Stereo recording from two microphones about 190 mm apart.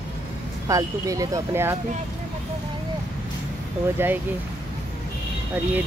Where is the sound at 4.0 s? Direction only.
10° right (ahead or behind).